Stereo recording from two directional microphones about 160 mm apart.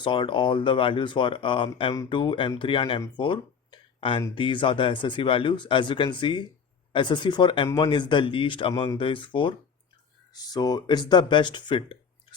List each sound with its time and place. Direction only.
0.0 s speech: 30° left (ahead or behind)